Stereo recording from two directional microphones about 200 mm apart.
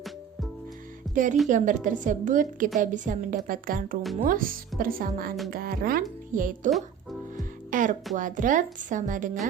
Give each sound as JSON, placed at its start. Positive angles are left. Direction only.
{"t": 1.1, "sound": "a woman's voice", "side_deg": -40}
{"t": 6.7, "sound": "music", "side_deg": 0}
{"t": 7.3, "sound": "music", "side_deg": -40}
{"t": 8.1, "sound": "a woman's voice", "side_deg": -40}